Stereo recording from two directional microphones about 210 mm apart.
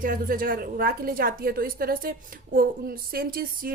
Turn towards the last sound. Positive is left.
turn(degrees=-45)  # may be behind; listen again after turning